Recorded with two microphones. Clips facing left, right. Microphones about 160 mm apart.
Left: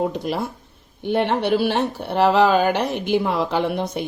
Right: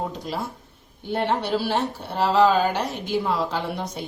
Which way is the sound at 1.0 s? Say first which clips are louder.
Left 4 dB; 70° left (ahead or behind).